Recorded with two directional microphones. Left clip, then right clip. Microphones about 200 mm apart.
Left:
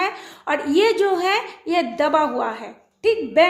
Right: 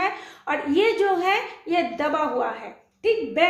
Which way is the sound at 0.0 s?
45° left (ahead or behind).